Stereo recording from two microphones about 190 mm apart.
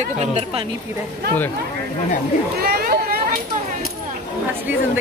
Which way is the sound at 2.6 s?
55° right (ahead or behind).